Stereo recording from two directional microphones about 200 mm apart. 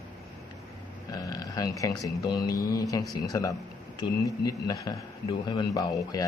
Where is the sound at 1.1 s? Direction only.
15° left (ahead or behind).